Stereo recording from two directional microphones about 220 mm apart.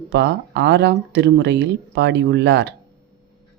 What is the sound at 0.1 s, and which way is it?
Speech, 50° right (ahead or behind).